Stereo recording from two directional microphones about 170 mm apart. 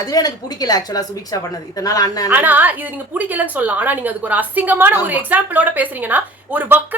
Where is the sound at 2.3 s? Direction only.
10° right (ahead or behind).